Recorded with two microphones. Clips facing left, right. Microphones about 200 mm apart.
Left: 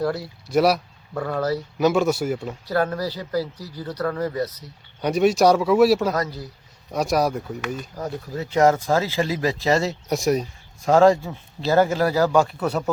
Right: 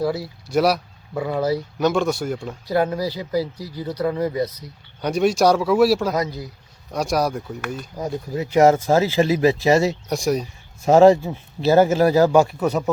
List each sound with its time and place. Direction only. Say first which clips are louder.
0.0 s speech: right 2 dB; 5° right (ahead or behind)
1.8 s a man's voice: left 2 dB; 5° left (ahead or behind)
2.6 s speech: right 2 dB; 15° right (ahead or behind)
5.0 s a man's voice: even; centre (ahead or behind)
6.1 s speech: right 2 dB; 10° right (ahead or behind)
6.9 s a man's voice: even; centre (ahead or behind)
8.3 s speech: right 3 dB; 20° right (ahead or behind)
10.1 s a man's voice: even; centre (ahead or behind)
10.8 s speech: right 3 dB; 20° right (ahead or behind)